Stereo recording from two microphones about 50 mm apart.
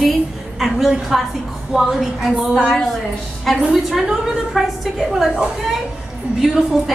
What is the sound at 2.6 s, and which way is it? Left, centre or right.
Speech, centre.